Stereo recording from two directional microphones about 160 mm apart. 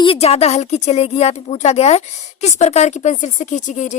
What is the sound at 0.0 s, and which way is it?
A woman's voice, 35° left (ahead or behind).